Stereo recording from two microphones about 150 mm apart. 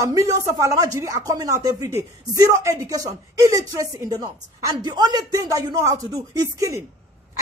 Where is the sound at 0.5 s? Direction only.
20° right (ahead or behind).